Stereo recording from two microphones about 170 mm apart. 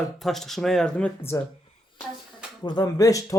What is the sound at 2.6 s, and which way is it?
Speech, 25° left (ahead or behind).